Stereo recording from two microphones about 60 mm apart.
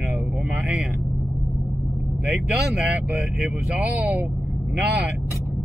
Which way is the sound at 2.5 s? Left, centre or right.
Centre.